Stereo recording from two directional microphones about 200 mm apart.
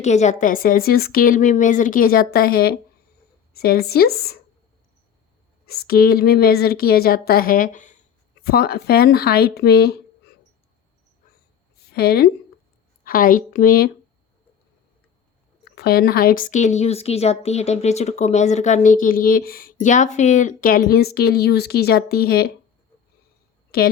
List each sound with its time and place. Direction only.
0.0 s a woman's voice: 35° left (ahead or behind); by 4.4 s 50° left (ahead or behind)
5.6 s a woman's voice: 50° left (ahead or behind)
8.4 s a woman's voice: 50° left (ahead or behind)
11.9 s a woman's voice: 50° left (ahead or behind)
15.7 s a woman's voice: 50° left (ahead or behind)